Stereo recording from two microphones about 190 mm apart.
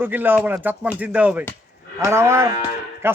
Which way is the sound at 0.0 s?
10° right (ahead or behind).